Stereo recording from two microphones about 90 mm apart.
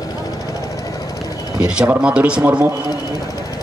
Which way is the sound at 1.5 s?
10° right (ahead or behind).